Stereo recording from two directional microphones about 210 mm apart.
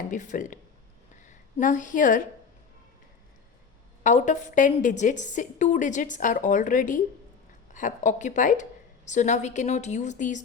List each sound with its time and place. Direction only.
0.1 s a woman's voice: 40° left (ahead or behind)
4.0 s a woman's voice: 35° left (ahead or behind)